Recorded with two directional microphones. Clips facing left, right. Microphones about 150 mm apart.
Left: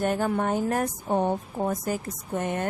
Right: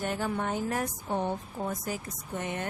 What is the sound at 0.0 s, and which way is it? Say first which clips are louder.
Speech: left 6 dB; 50° left (ahead or behind).